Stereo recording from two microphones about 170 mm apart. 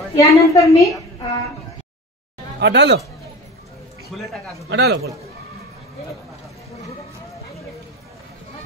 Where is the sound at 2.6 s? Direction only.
90° right.